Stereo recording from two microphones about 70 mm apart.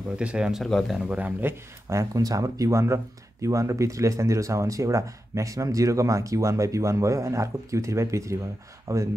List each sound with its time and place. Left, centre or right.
0.2 s speech: centre
0.7 s speech: centre
1.1 s speech: right
1.9 s speech: right
2.2 s speech: right
2.8 s speech: right